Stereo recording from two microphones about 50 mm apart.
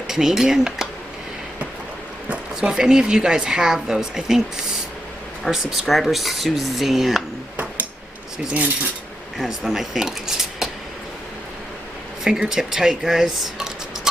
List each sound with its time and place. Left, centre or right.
0.1 s speech: centre
2.2 s a sound: right
2.7 s speech: centre
5.4 s speech: centre
9.4 s speech: centre
12.3 s speech: centre